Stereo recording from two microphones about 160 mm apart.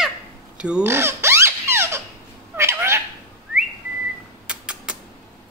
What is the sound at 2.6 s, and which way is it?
Cat, 15° right (ahead or behind).